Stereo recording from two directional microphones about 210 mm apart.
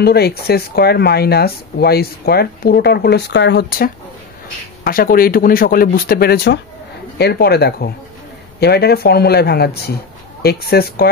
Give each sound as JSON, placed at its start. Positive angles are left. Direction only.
{"t": 0.0, "sound": "speech", "side_deg": 50}